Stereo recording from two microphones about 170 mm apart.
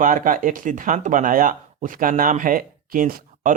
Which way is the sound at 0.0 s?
50° right (ahead or behind).